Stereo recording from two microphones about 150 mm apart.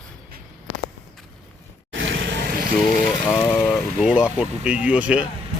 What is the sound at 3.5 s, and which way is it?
Vehicle, 5° left (ahead or behind).